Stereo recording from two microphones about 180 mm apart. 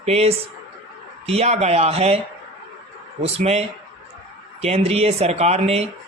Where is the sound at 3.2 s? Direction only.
35° right (ahead or behind).